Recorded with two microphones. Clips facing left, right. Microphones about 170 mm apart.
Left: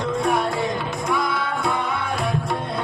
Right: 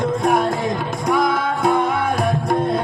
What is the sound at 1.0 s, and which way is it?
Music, 45° right (ahead or behind).